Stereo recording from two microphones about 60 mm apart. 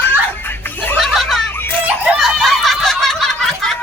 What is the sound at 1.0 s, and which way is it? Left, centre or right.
Music, centre.